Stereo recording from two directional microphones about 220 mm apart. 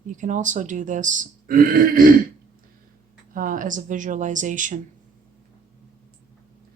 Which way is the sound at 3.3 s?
40° right (ahead or behind).